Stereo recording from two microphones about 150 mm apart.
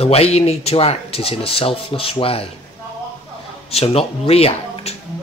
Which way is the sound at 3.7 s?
40° left (ahead or behind).